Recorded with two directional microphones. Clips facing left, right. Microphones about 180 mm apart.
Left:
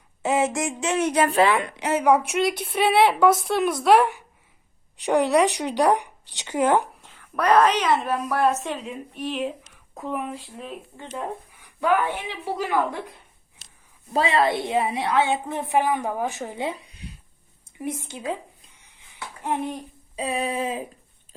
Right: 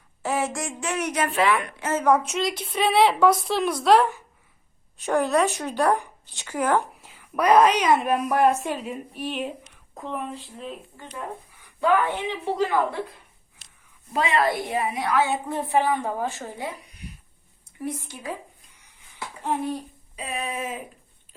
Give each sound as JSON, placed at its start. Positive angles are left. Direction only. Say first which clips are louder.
{"t": 0.2, "sound": "a woman's voice", "louder": "left 4 dB", "side_deg": 20}
{"t": 1.8, "sound": "a woman's voice", "louder": "left 2 dB", "side_deg": 15}
{"t": 7.0, "sound": "a woman's voice", "louder": "right 1 dB", "side_deg": -10}
{"t": 10.9, "sound": "a woman's voice", "louder": "left 3 dB", "side_deg": 20}
{"t": 14.1, "sound": "a woman's voice", "louder": "left 2 dB", "side_deg": 30}
{"t": 19.4, "sound": "a woman's voice", "louder": "even", "side_deg": 20}
{"t": 20.1, "sound": "a sound", "louder": "left 5 dB", "side_deg": 35}